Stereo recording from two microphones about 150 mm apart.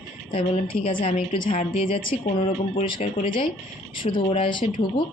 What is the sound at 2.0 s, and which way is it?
Speech, 65° left (ahead or behind).